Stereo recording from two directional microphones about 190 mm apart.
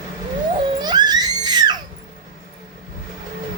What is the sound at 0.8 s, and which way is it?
Screaming, 20° right (ahead or behind).